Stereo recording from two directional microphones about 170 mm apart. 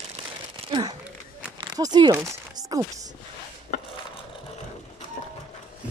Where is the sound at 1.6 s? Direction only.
25° right (ahead or behind).